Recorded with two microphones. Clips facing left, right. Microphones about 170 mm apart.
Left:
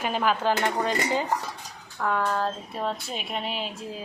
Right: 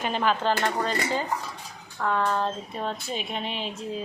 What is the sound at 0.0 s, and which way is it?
Speech, 5° left (ahead or behind).